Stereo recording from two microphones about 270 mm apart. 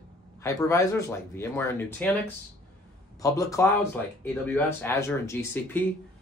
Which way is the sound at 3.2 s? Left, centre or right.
Centre.